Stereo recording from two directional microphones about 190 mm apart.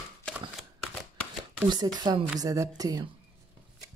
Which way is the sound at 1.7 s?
20° right (ahead or behind).